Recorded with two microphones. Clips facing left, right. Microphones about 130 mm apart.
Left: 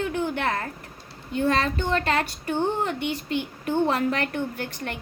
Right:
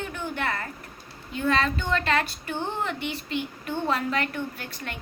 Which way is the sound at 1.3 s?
45° left (ahead or behind).